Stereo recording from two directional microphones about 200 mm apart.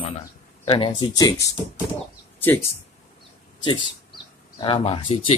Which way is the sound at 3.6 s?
25° left (ahead or behind).